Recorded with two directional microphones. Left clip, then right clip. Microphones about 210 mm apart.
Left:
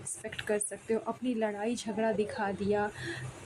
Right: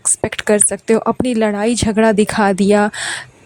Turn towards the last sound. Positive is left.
turn(degrees=-50)  # may be behind; listen again after turning